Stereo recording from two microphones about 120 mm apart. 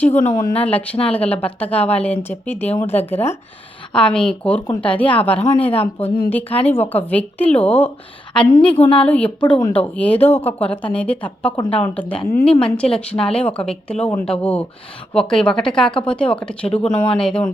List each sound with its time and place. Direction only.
0.5 s speech: 10° left (ahead or behind)